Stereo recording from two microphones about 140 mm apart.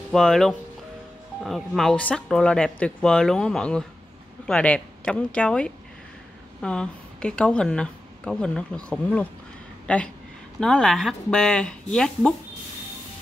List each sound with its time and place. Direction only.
0.1 s speech: 5° left (ahead or behind)